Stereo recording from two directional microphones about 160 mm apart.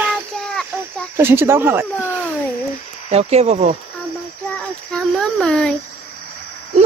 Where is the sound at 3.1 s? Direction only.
40° right (ahead or behind).